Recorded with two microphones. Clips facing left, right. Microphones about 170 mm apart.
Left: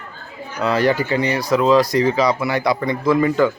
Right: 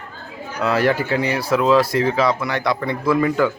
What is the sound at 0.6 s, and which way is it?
A man's voice, 5° right (ahead or behind).